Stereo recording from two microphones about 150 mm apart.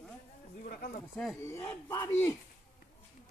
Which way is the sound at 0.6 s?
75° left (ahead or behind).